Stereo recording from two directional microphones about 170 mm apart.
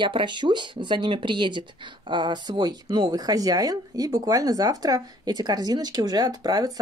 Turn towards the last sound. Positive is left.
turn(degrees=-25)  # may be behind; listen again after turning